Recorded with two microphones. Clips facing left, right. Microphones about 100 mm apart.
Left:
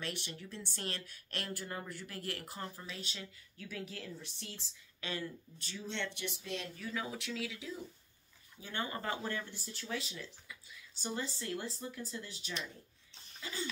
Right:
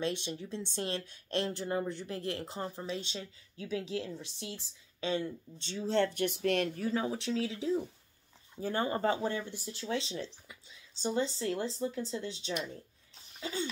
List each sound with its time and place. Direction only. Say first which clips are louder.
0.0 s speech: right 8 dB; 20° right (ahead or behind)
5.9 s speech: right 12 dB; 40° right (ahead or behind); by 6.8 s 60° right (ahead or behind)
6.8 s speech: right 8 dB; 35° right (ahead or behind)
13.4 s laughter: right 6 dB; 25° right (ahead or behind)